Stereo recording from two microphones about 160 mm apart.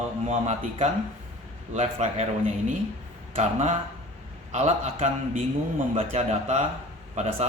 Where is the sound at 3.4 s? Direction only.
45° right (ahead or behind).